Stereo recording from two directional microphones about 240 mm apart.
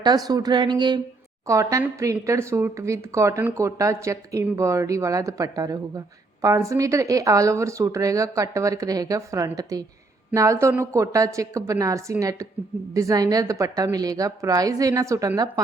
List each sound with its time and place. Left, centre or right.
0.0 s speech: centre